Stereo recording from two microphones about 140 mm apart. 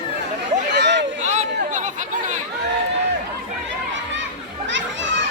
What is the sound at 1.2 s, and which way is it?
Chatter, 55° right (ahead or behind).